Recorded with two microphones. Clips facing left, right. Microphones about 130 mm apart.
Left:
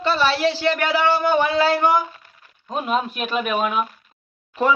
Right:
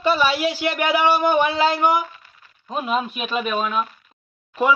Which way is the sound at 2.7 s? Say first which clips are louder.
Left 1 dB; centre (ahead or behind).